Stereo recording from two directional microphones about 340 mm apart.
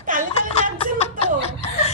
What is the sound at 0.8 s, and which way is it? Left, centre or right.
Chuckle, centre.